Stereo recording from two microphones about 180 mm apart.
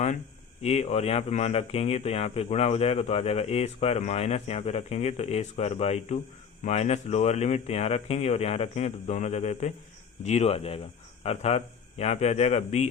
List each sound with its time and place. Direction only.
0.6 s speech: 35° left (ahead or behind)